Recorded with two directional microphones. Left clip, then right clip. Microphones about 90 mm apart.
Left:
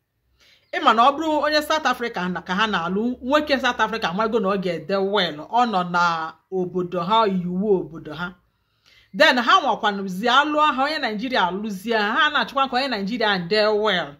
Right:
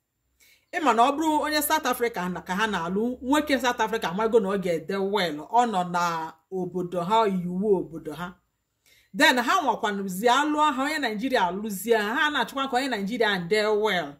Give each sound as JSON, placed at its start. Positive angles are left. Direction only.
{"t": 0.7, "sound": "speech", "side_deg": 20}